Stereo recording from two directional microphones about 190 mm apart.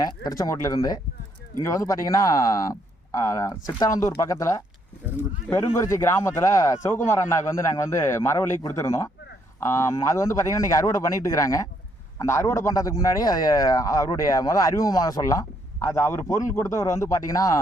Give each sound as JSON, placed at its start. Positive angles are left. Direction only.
{"t": 0.3, "sound": "a man's voice", "side_deg": 20}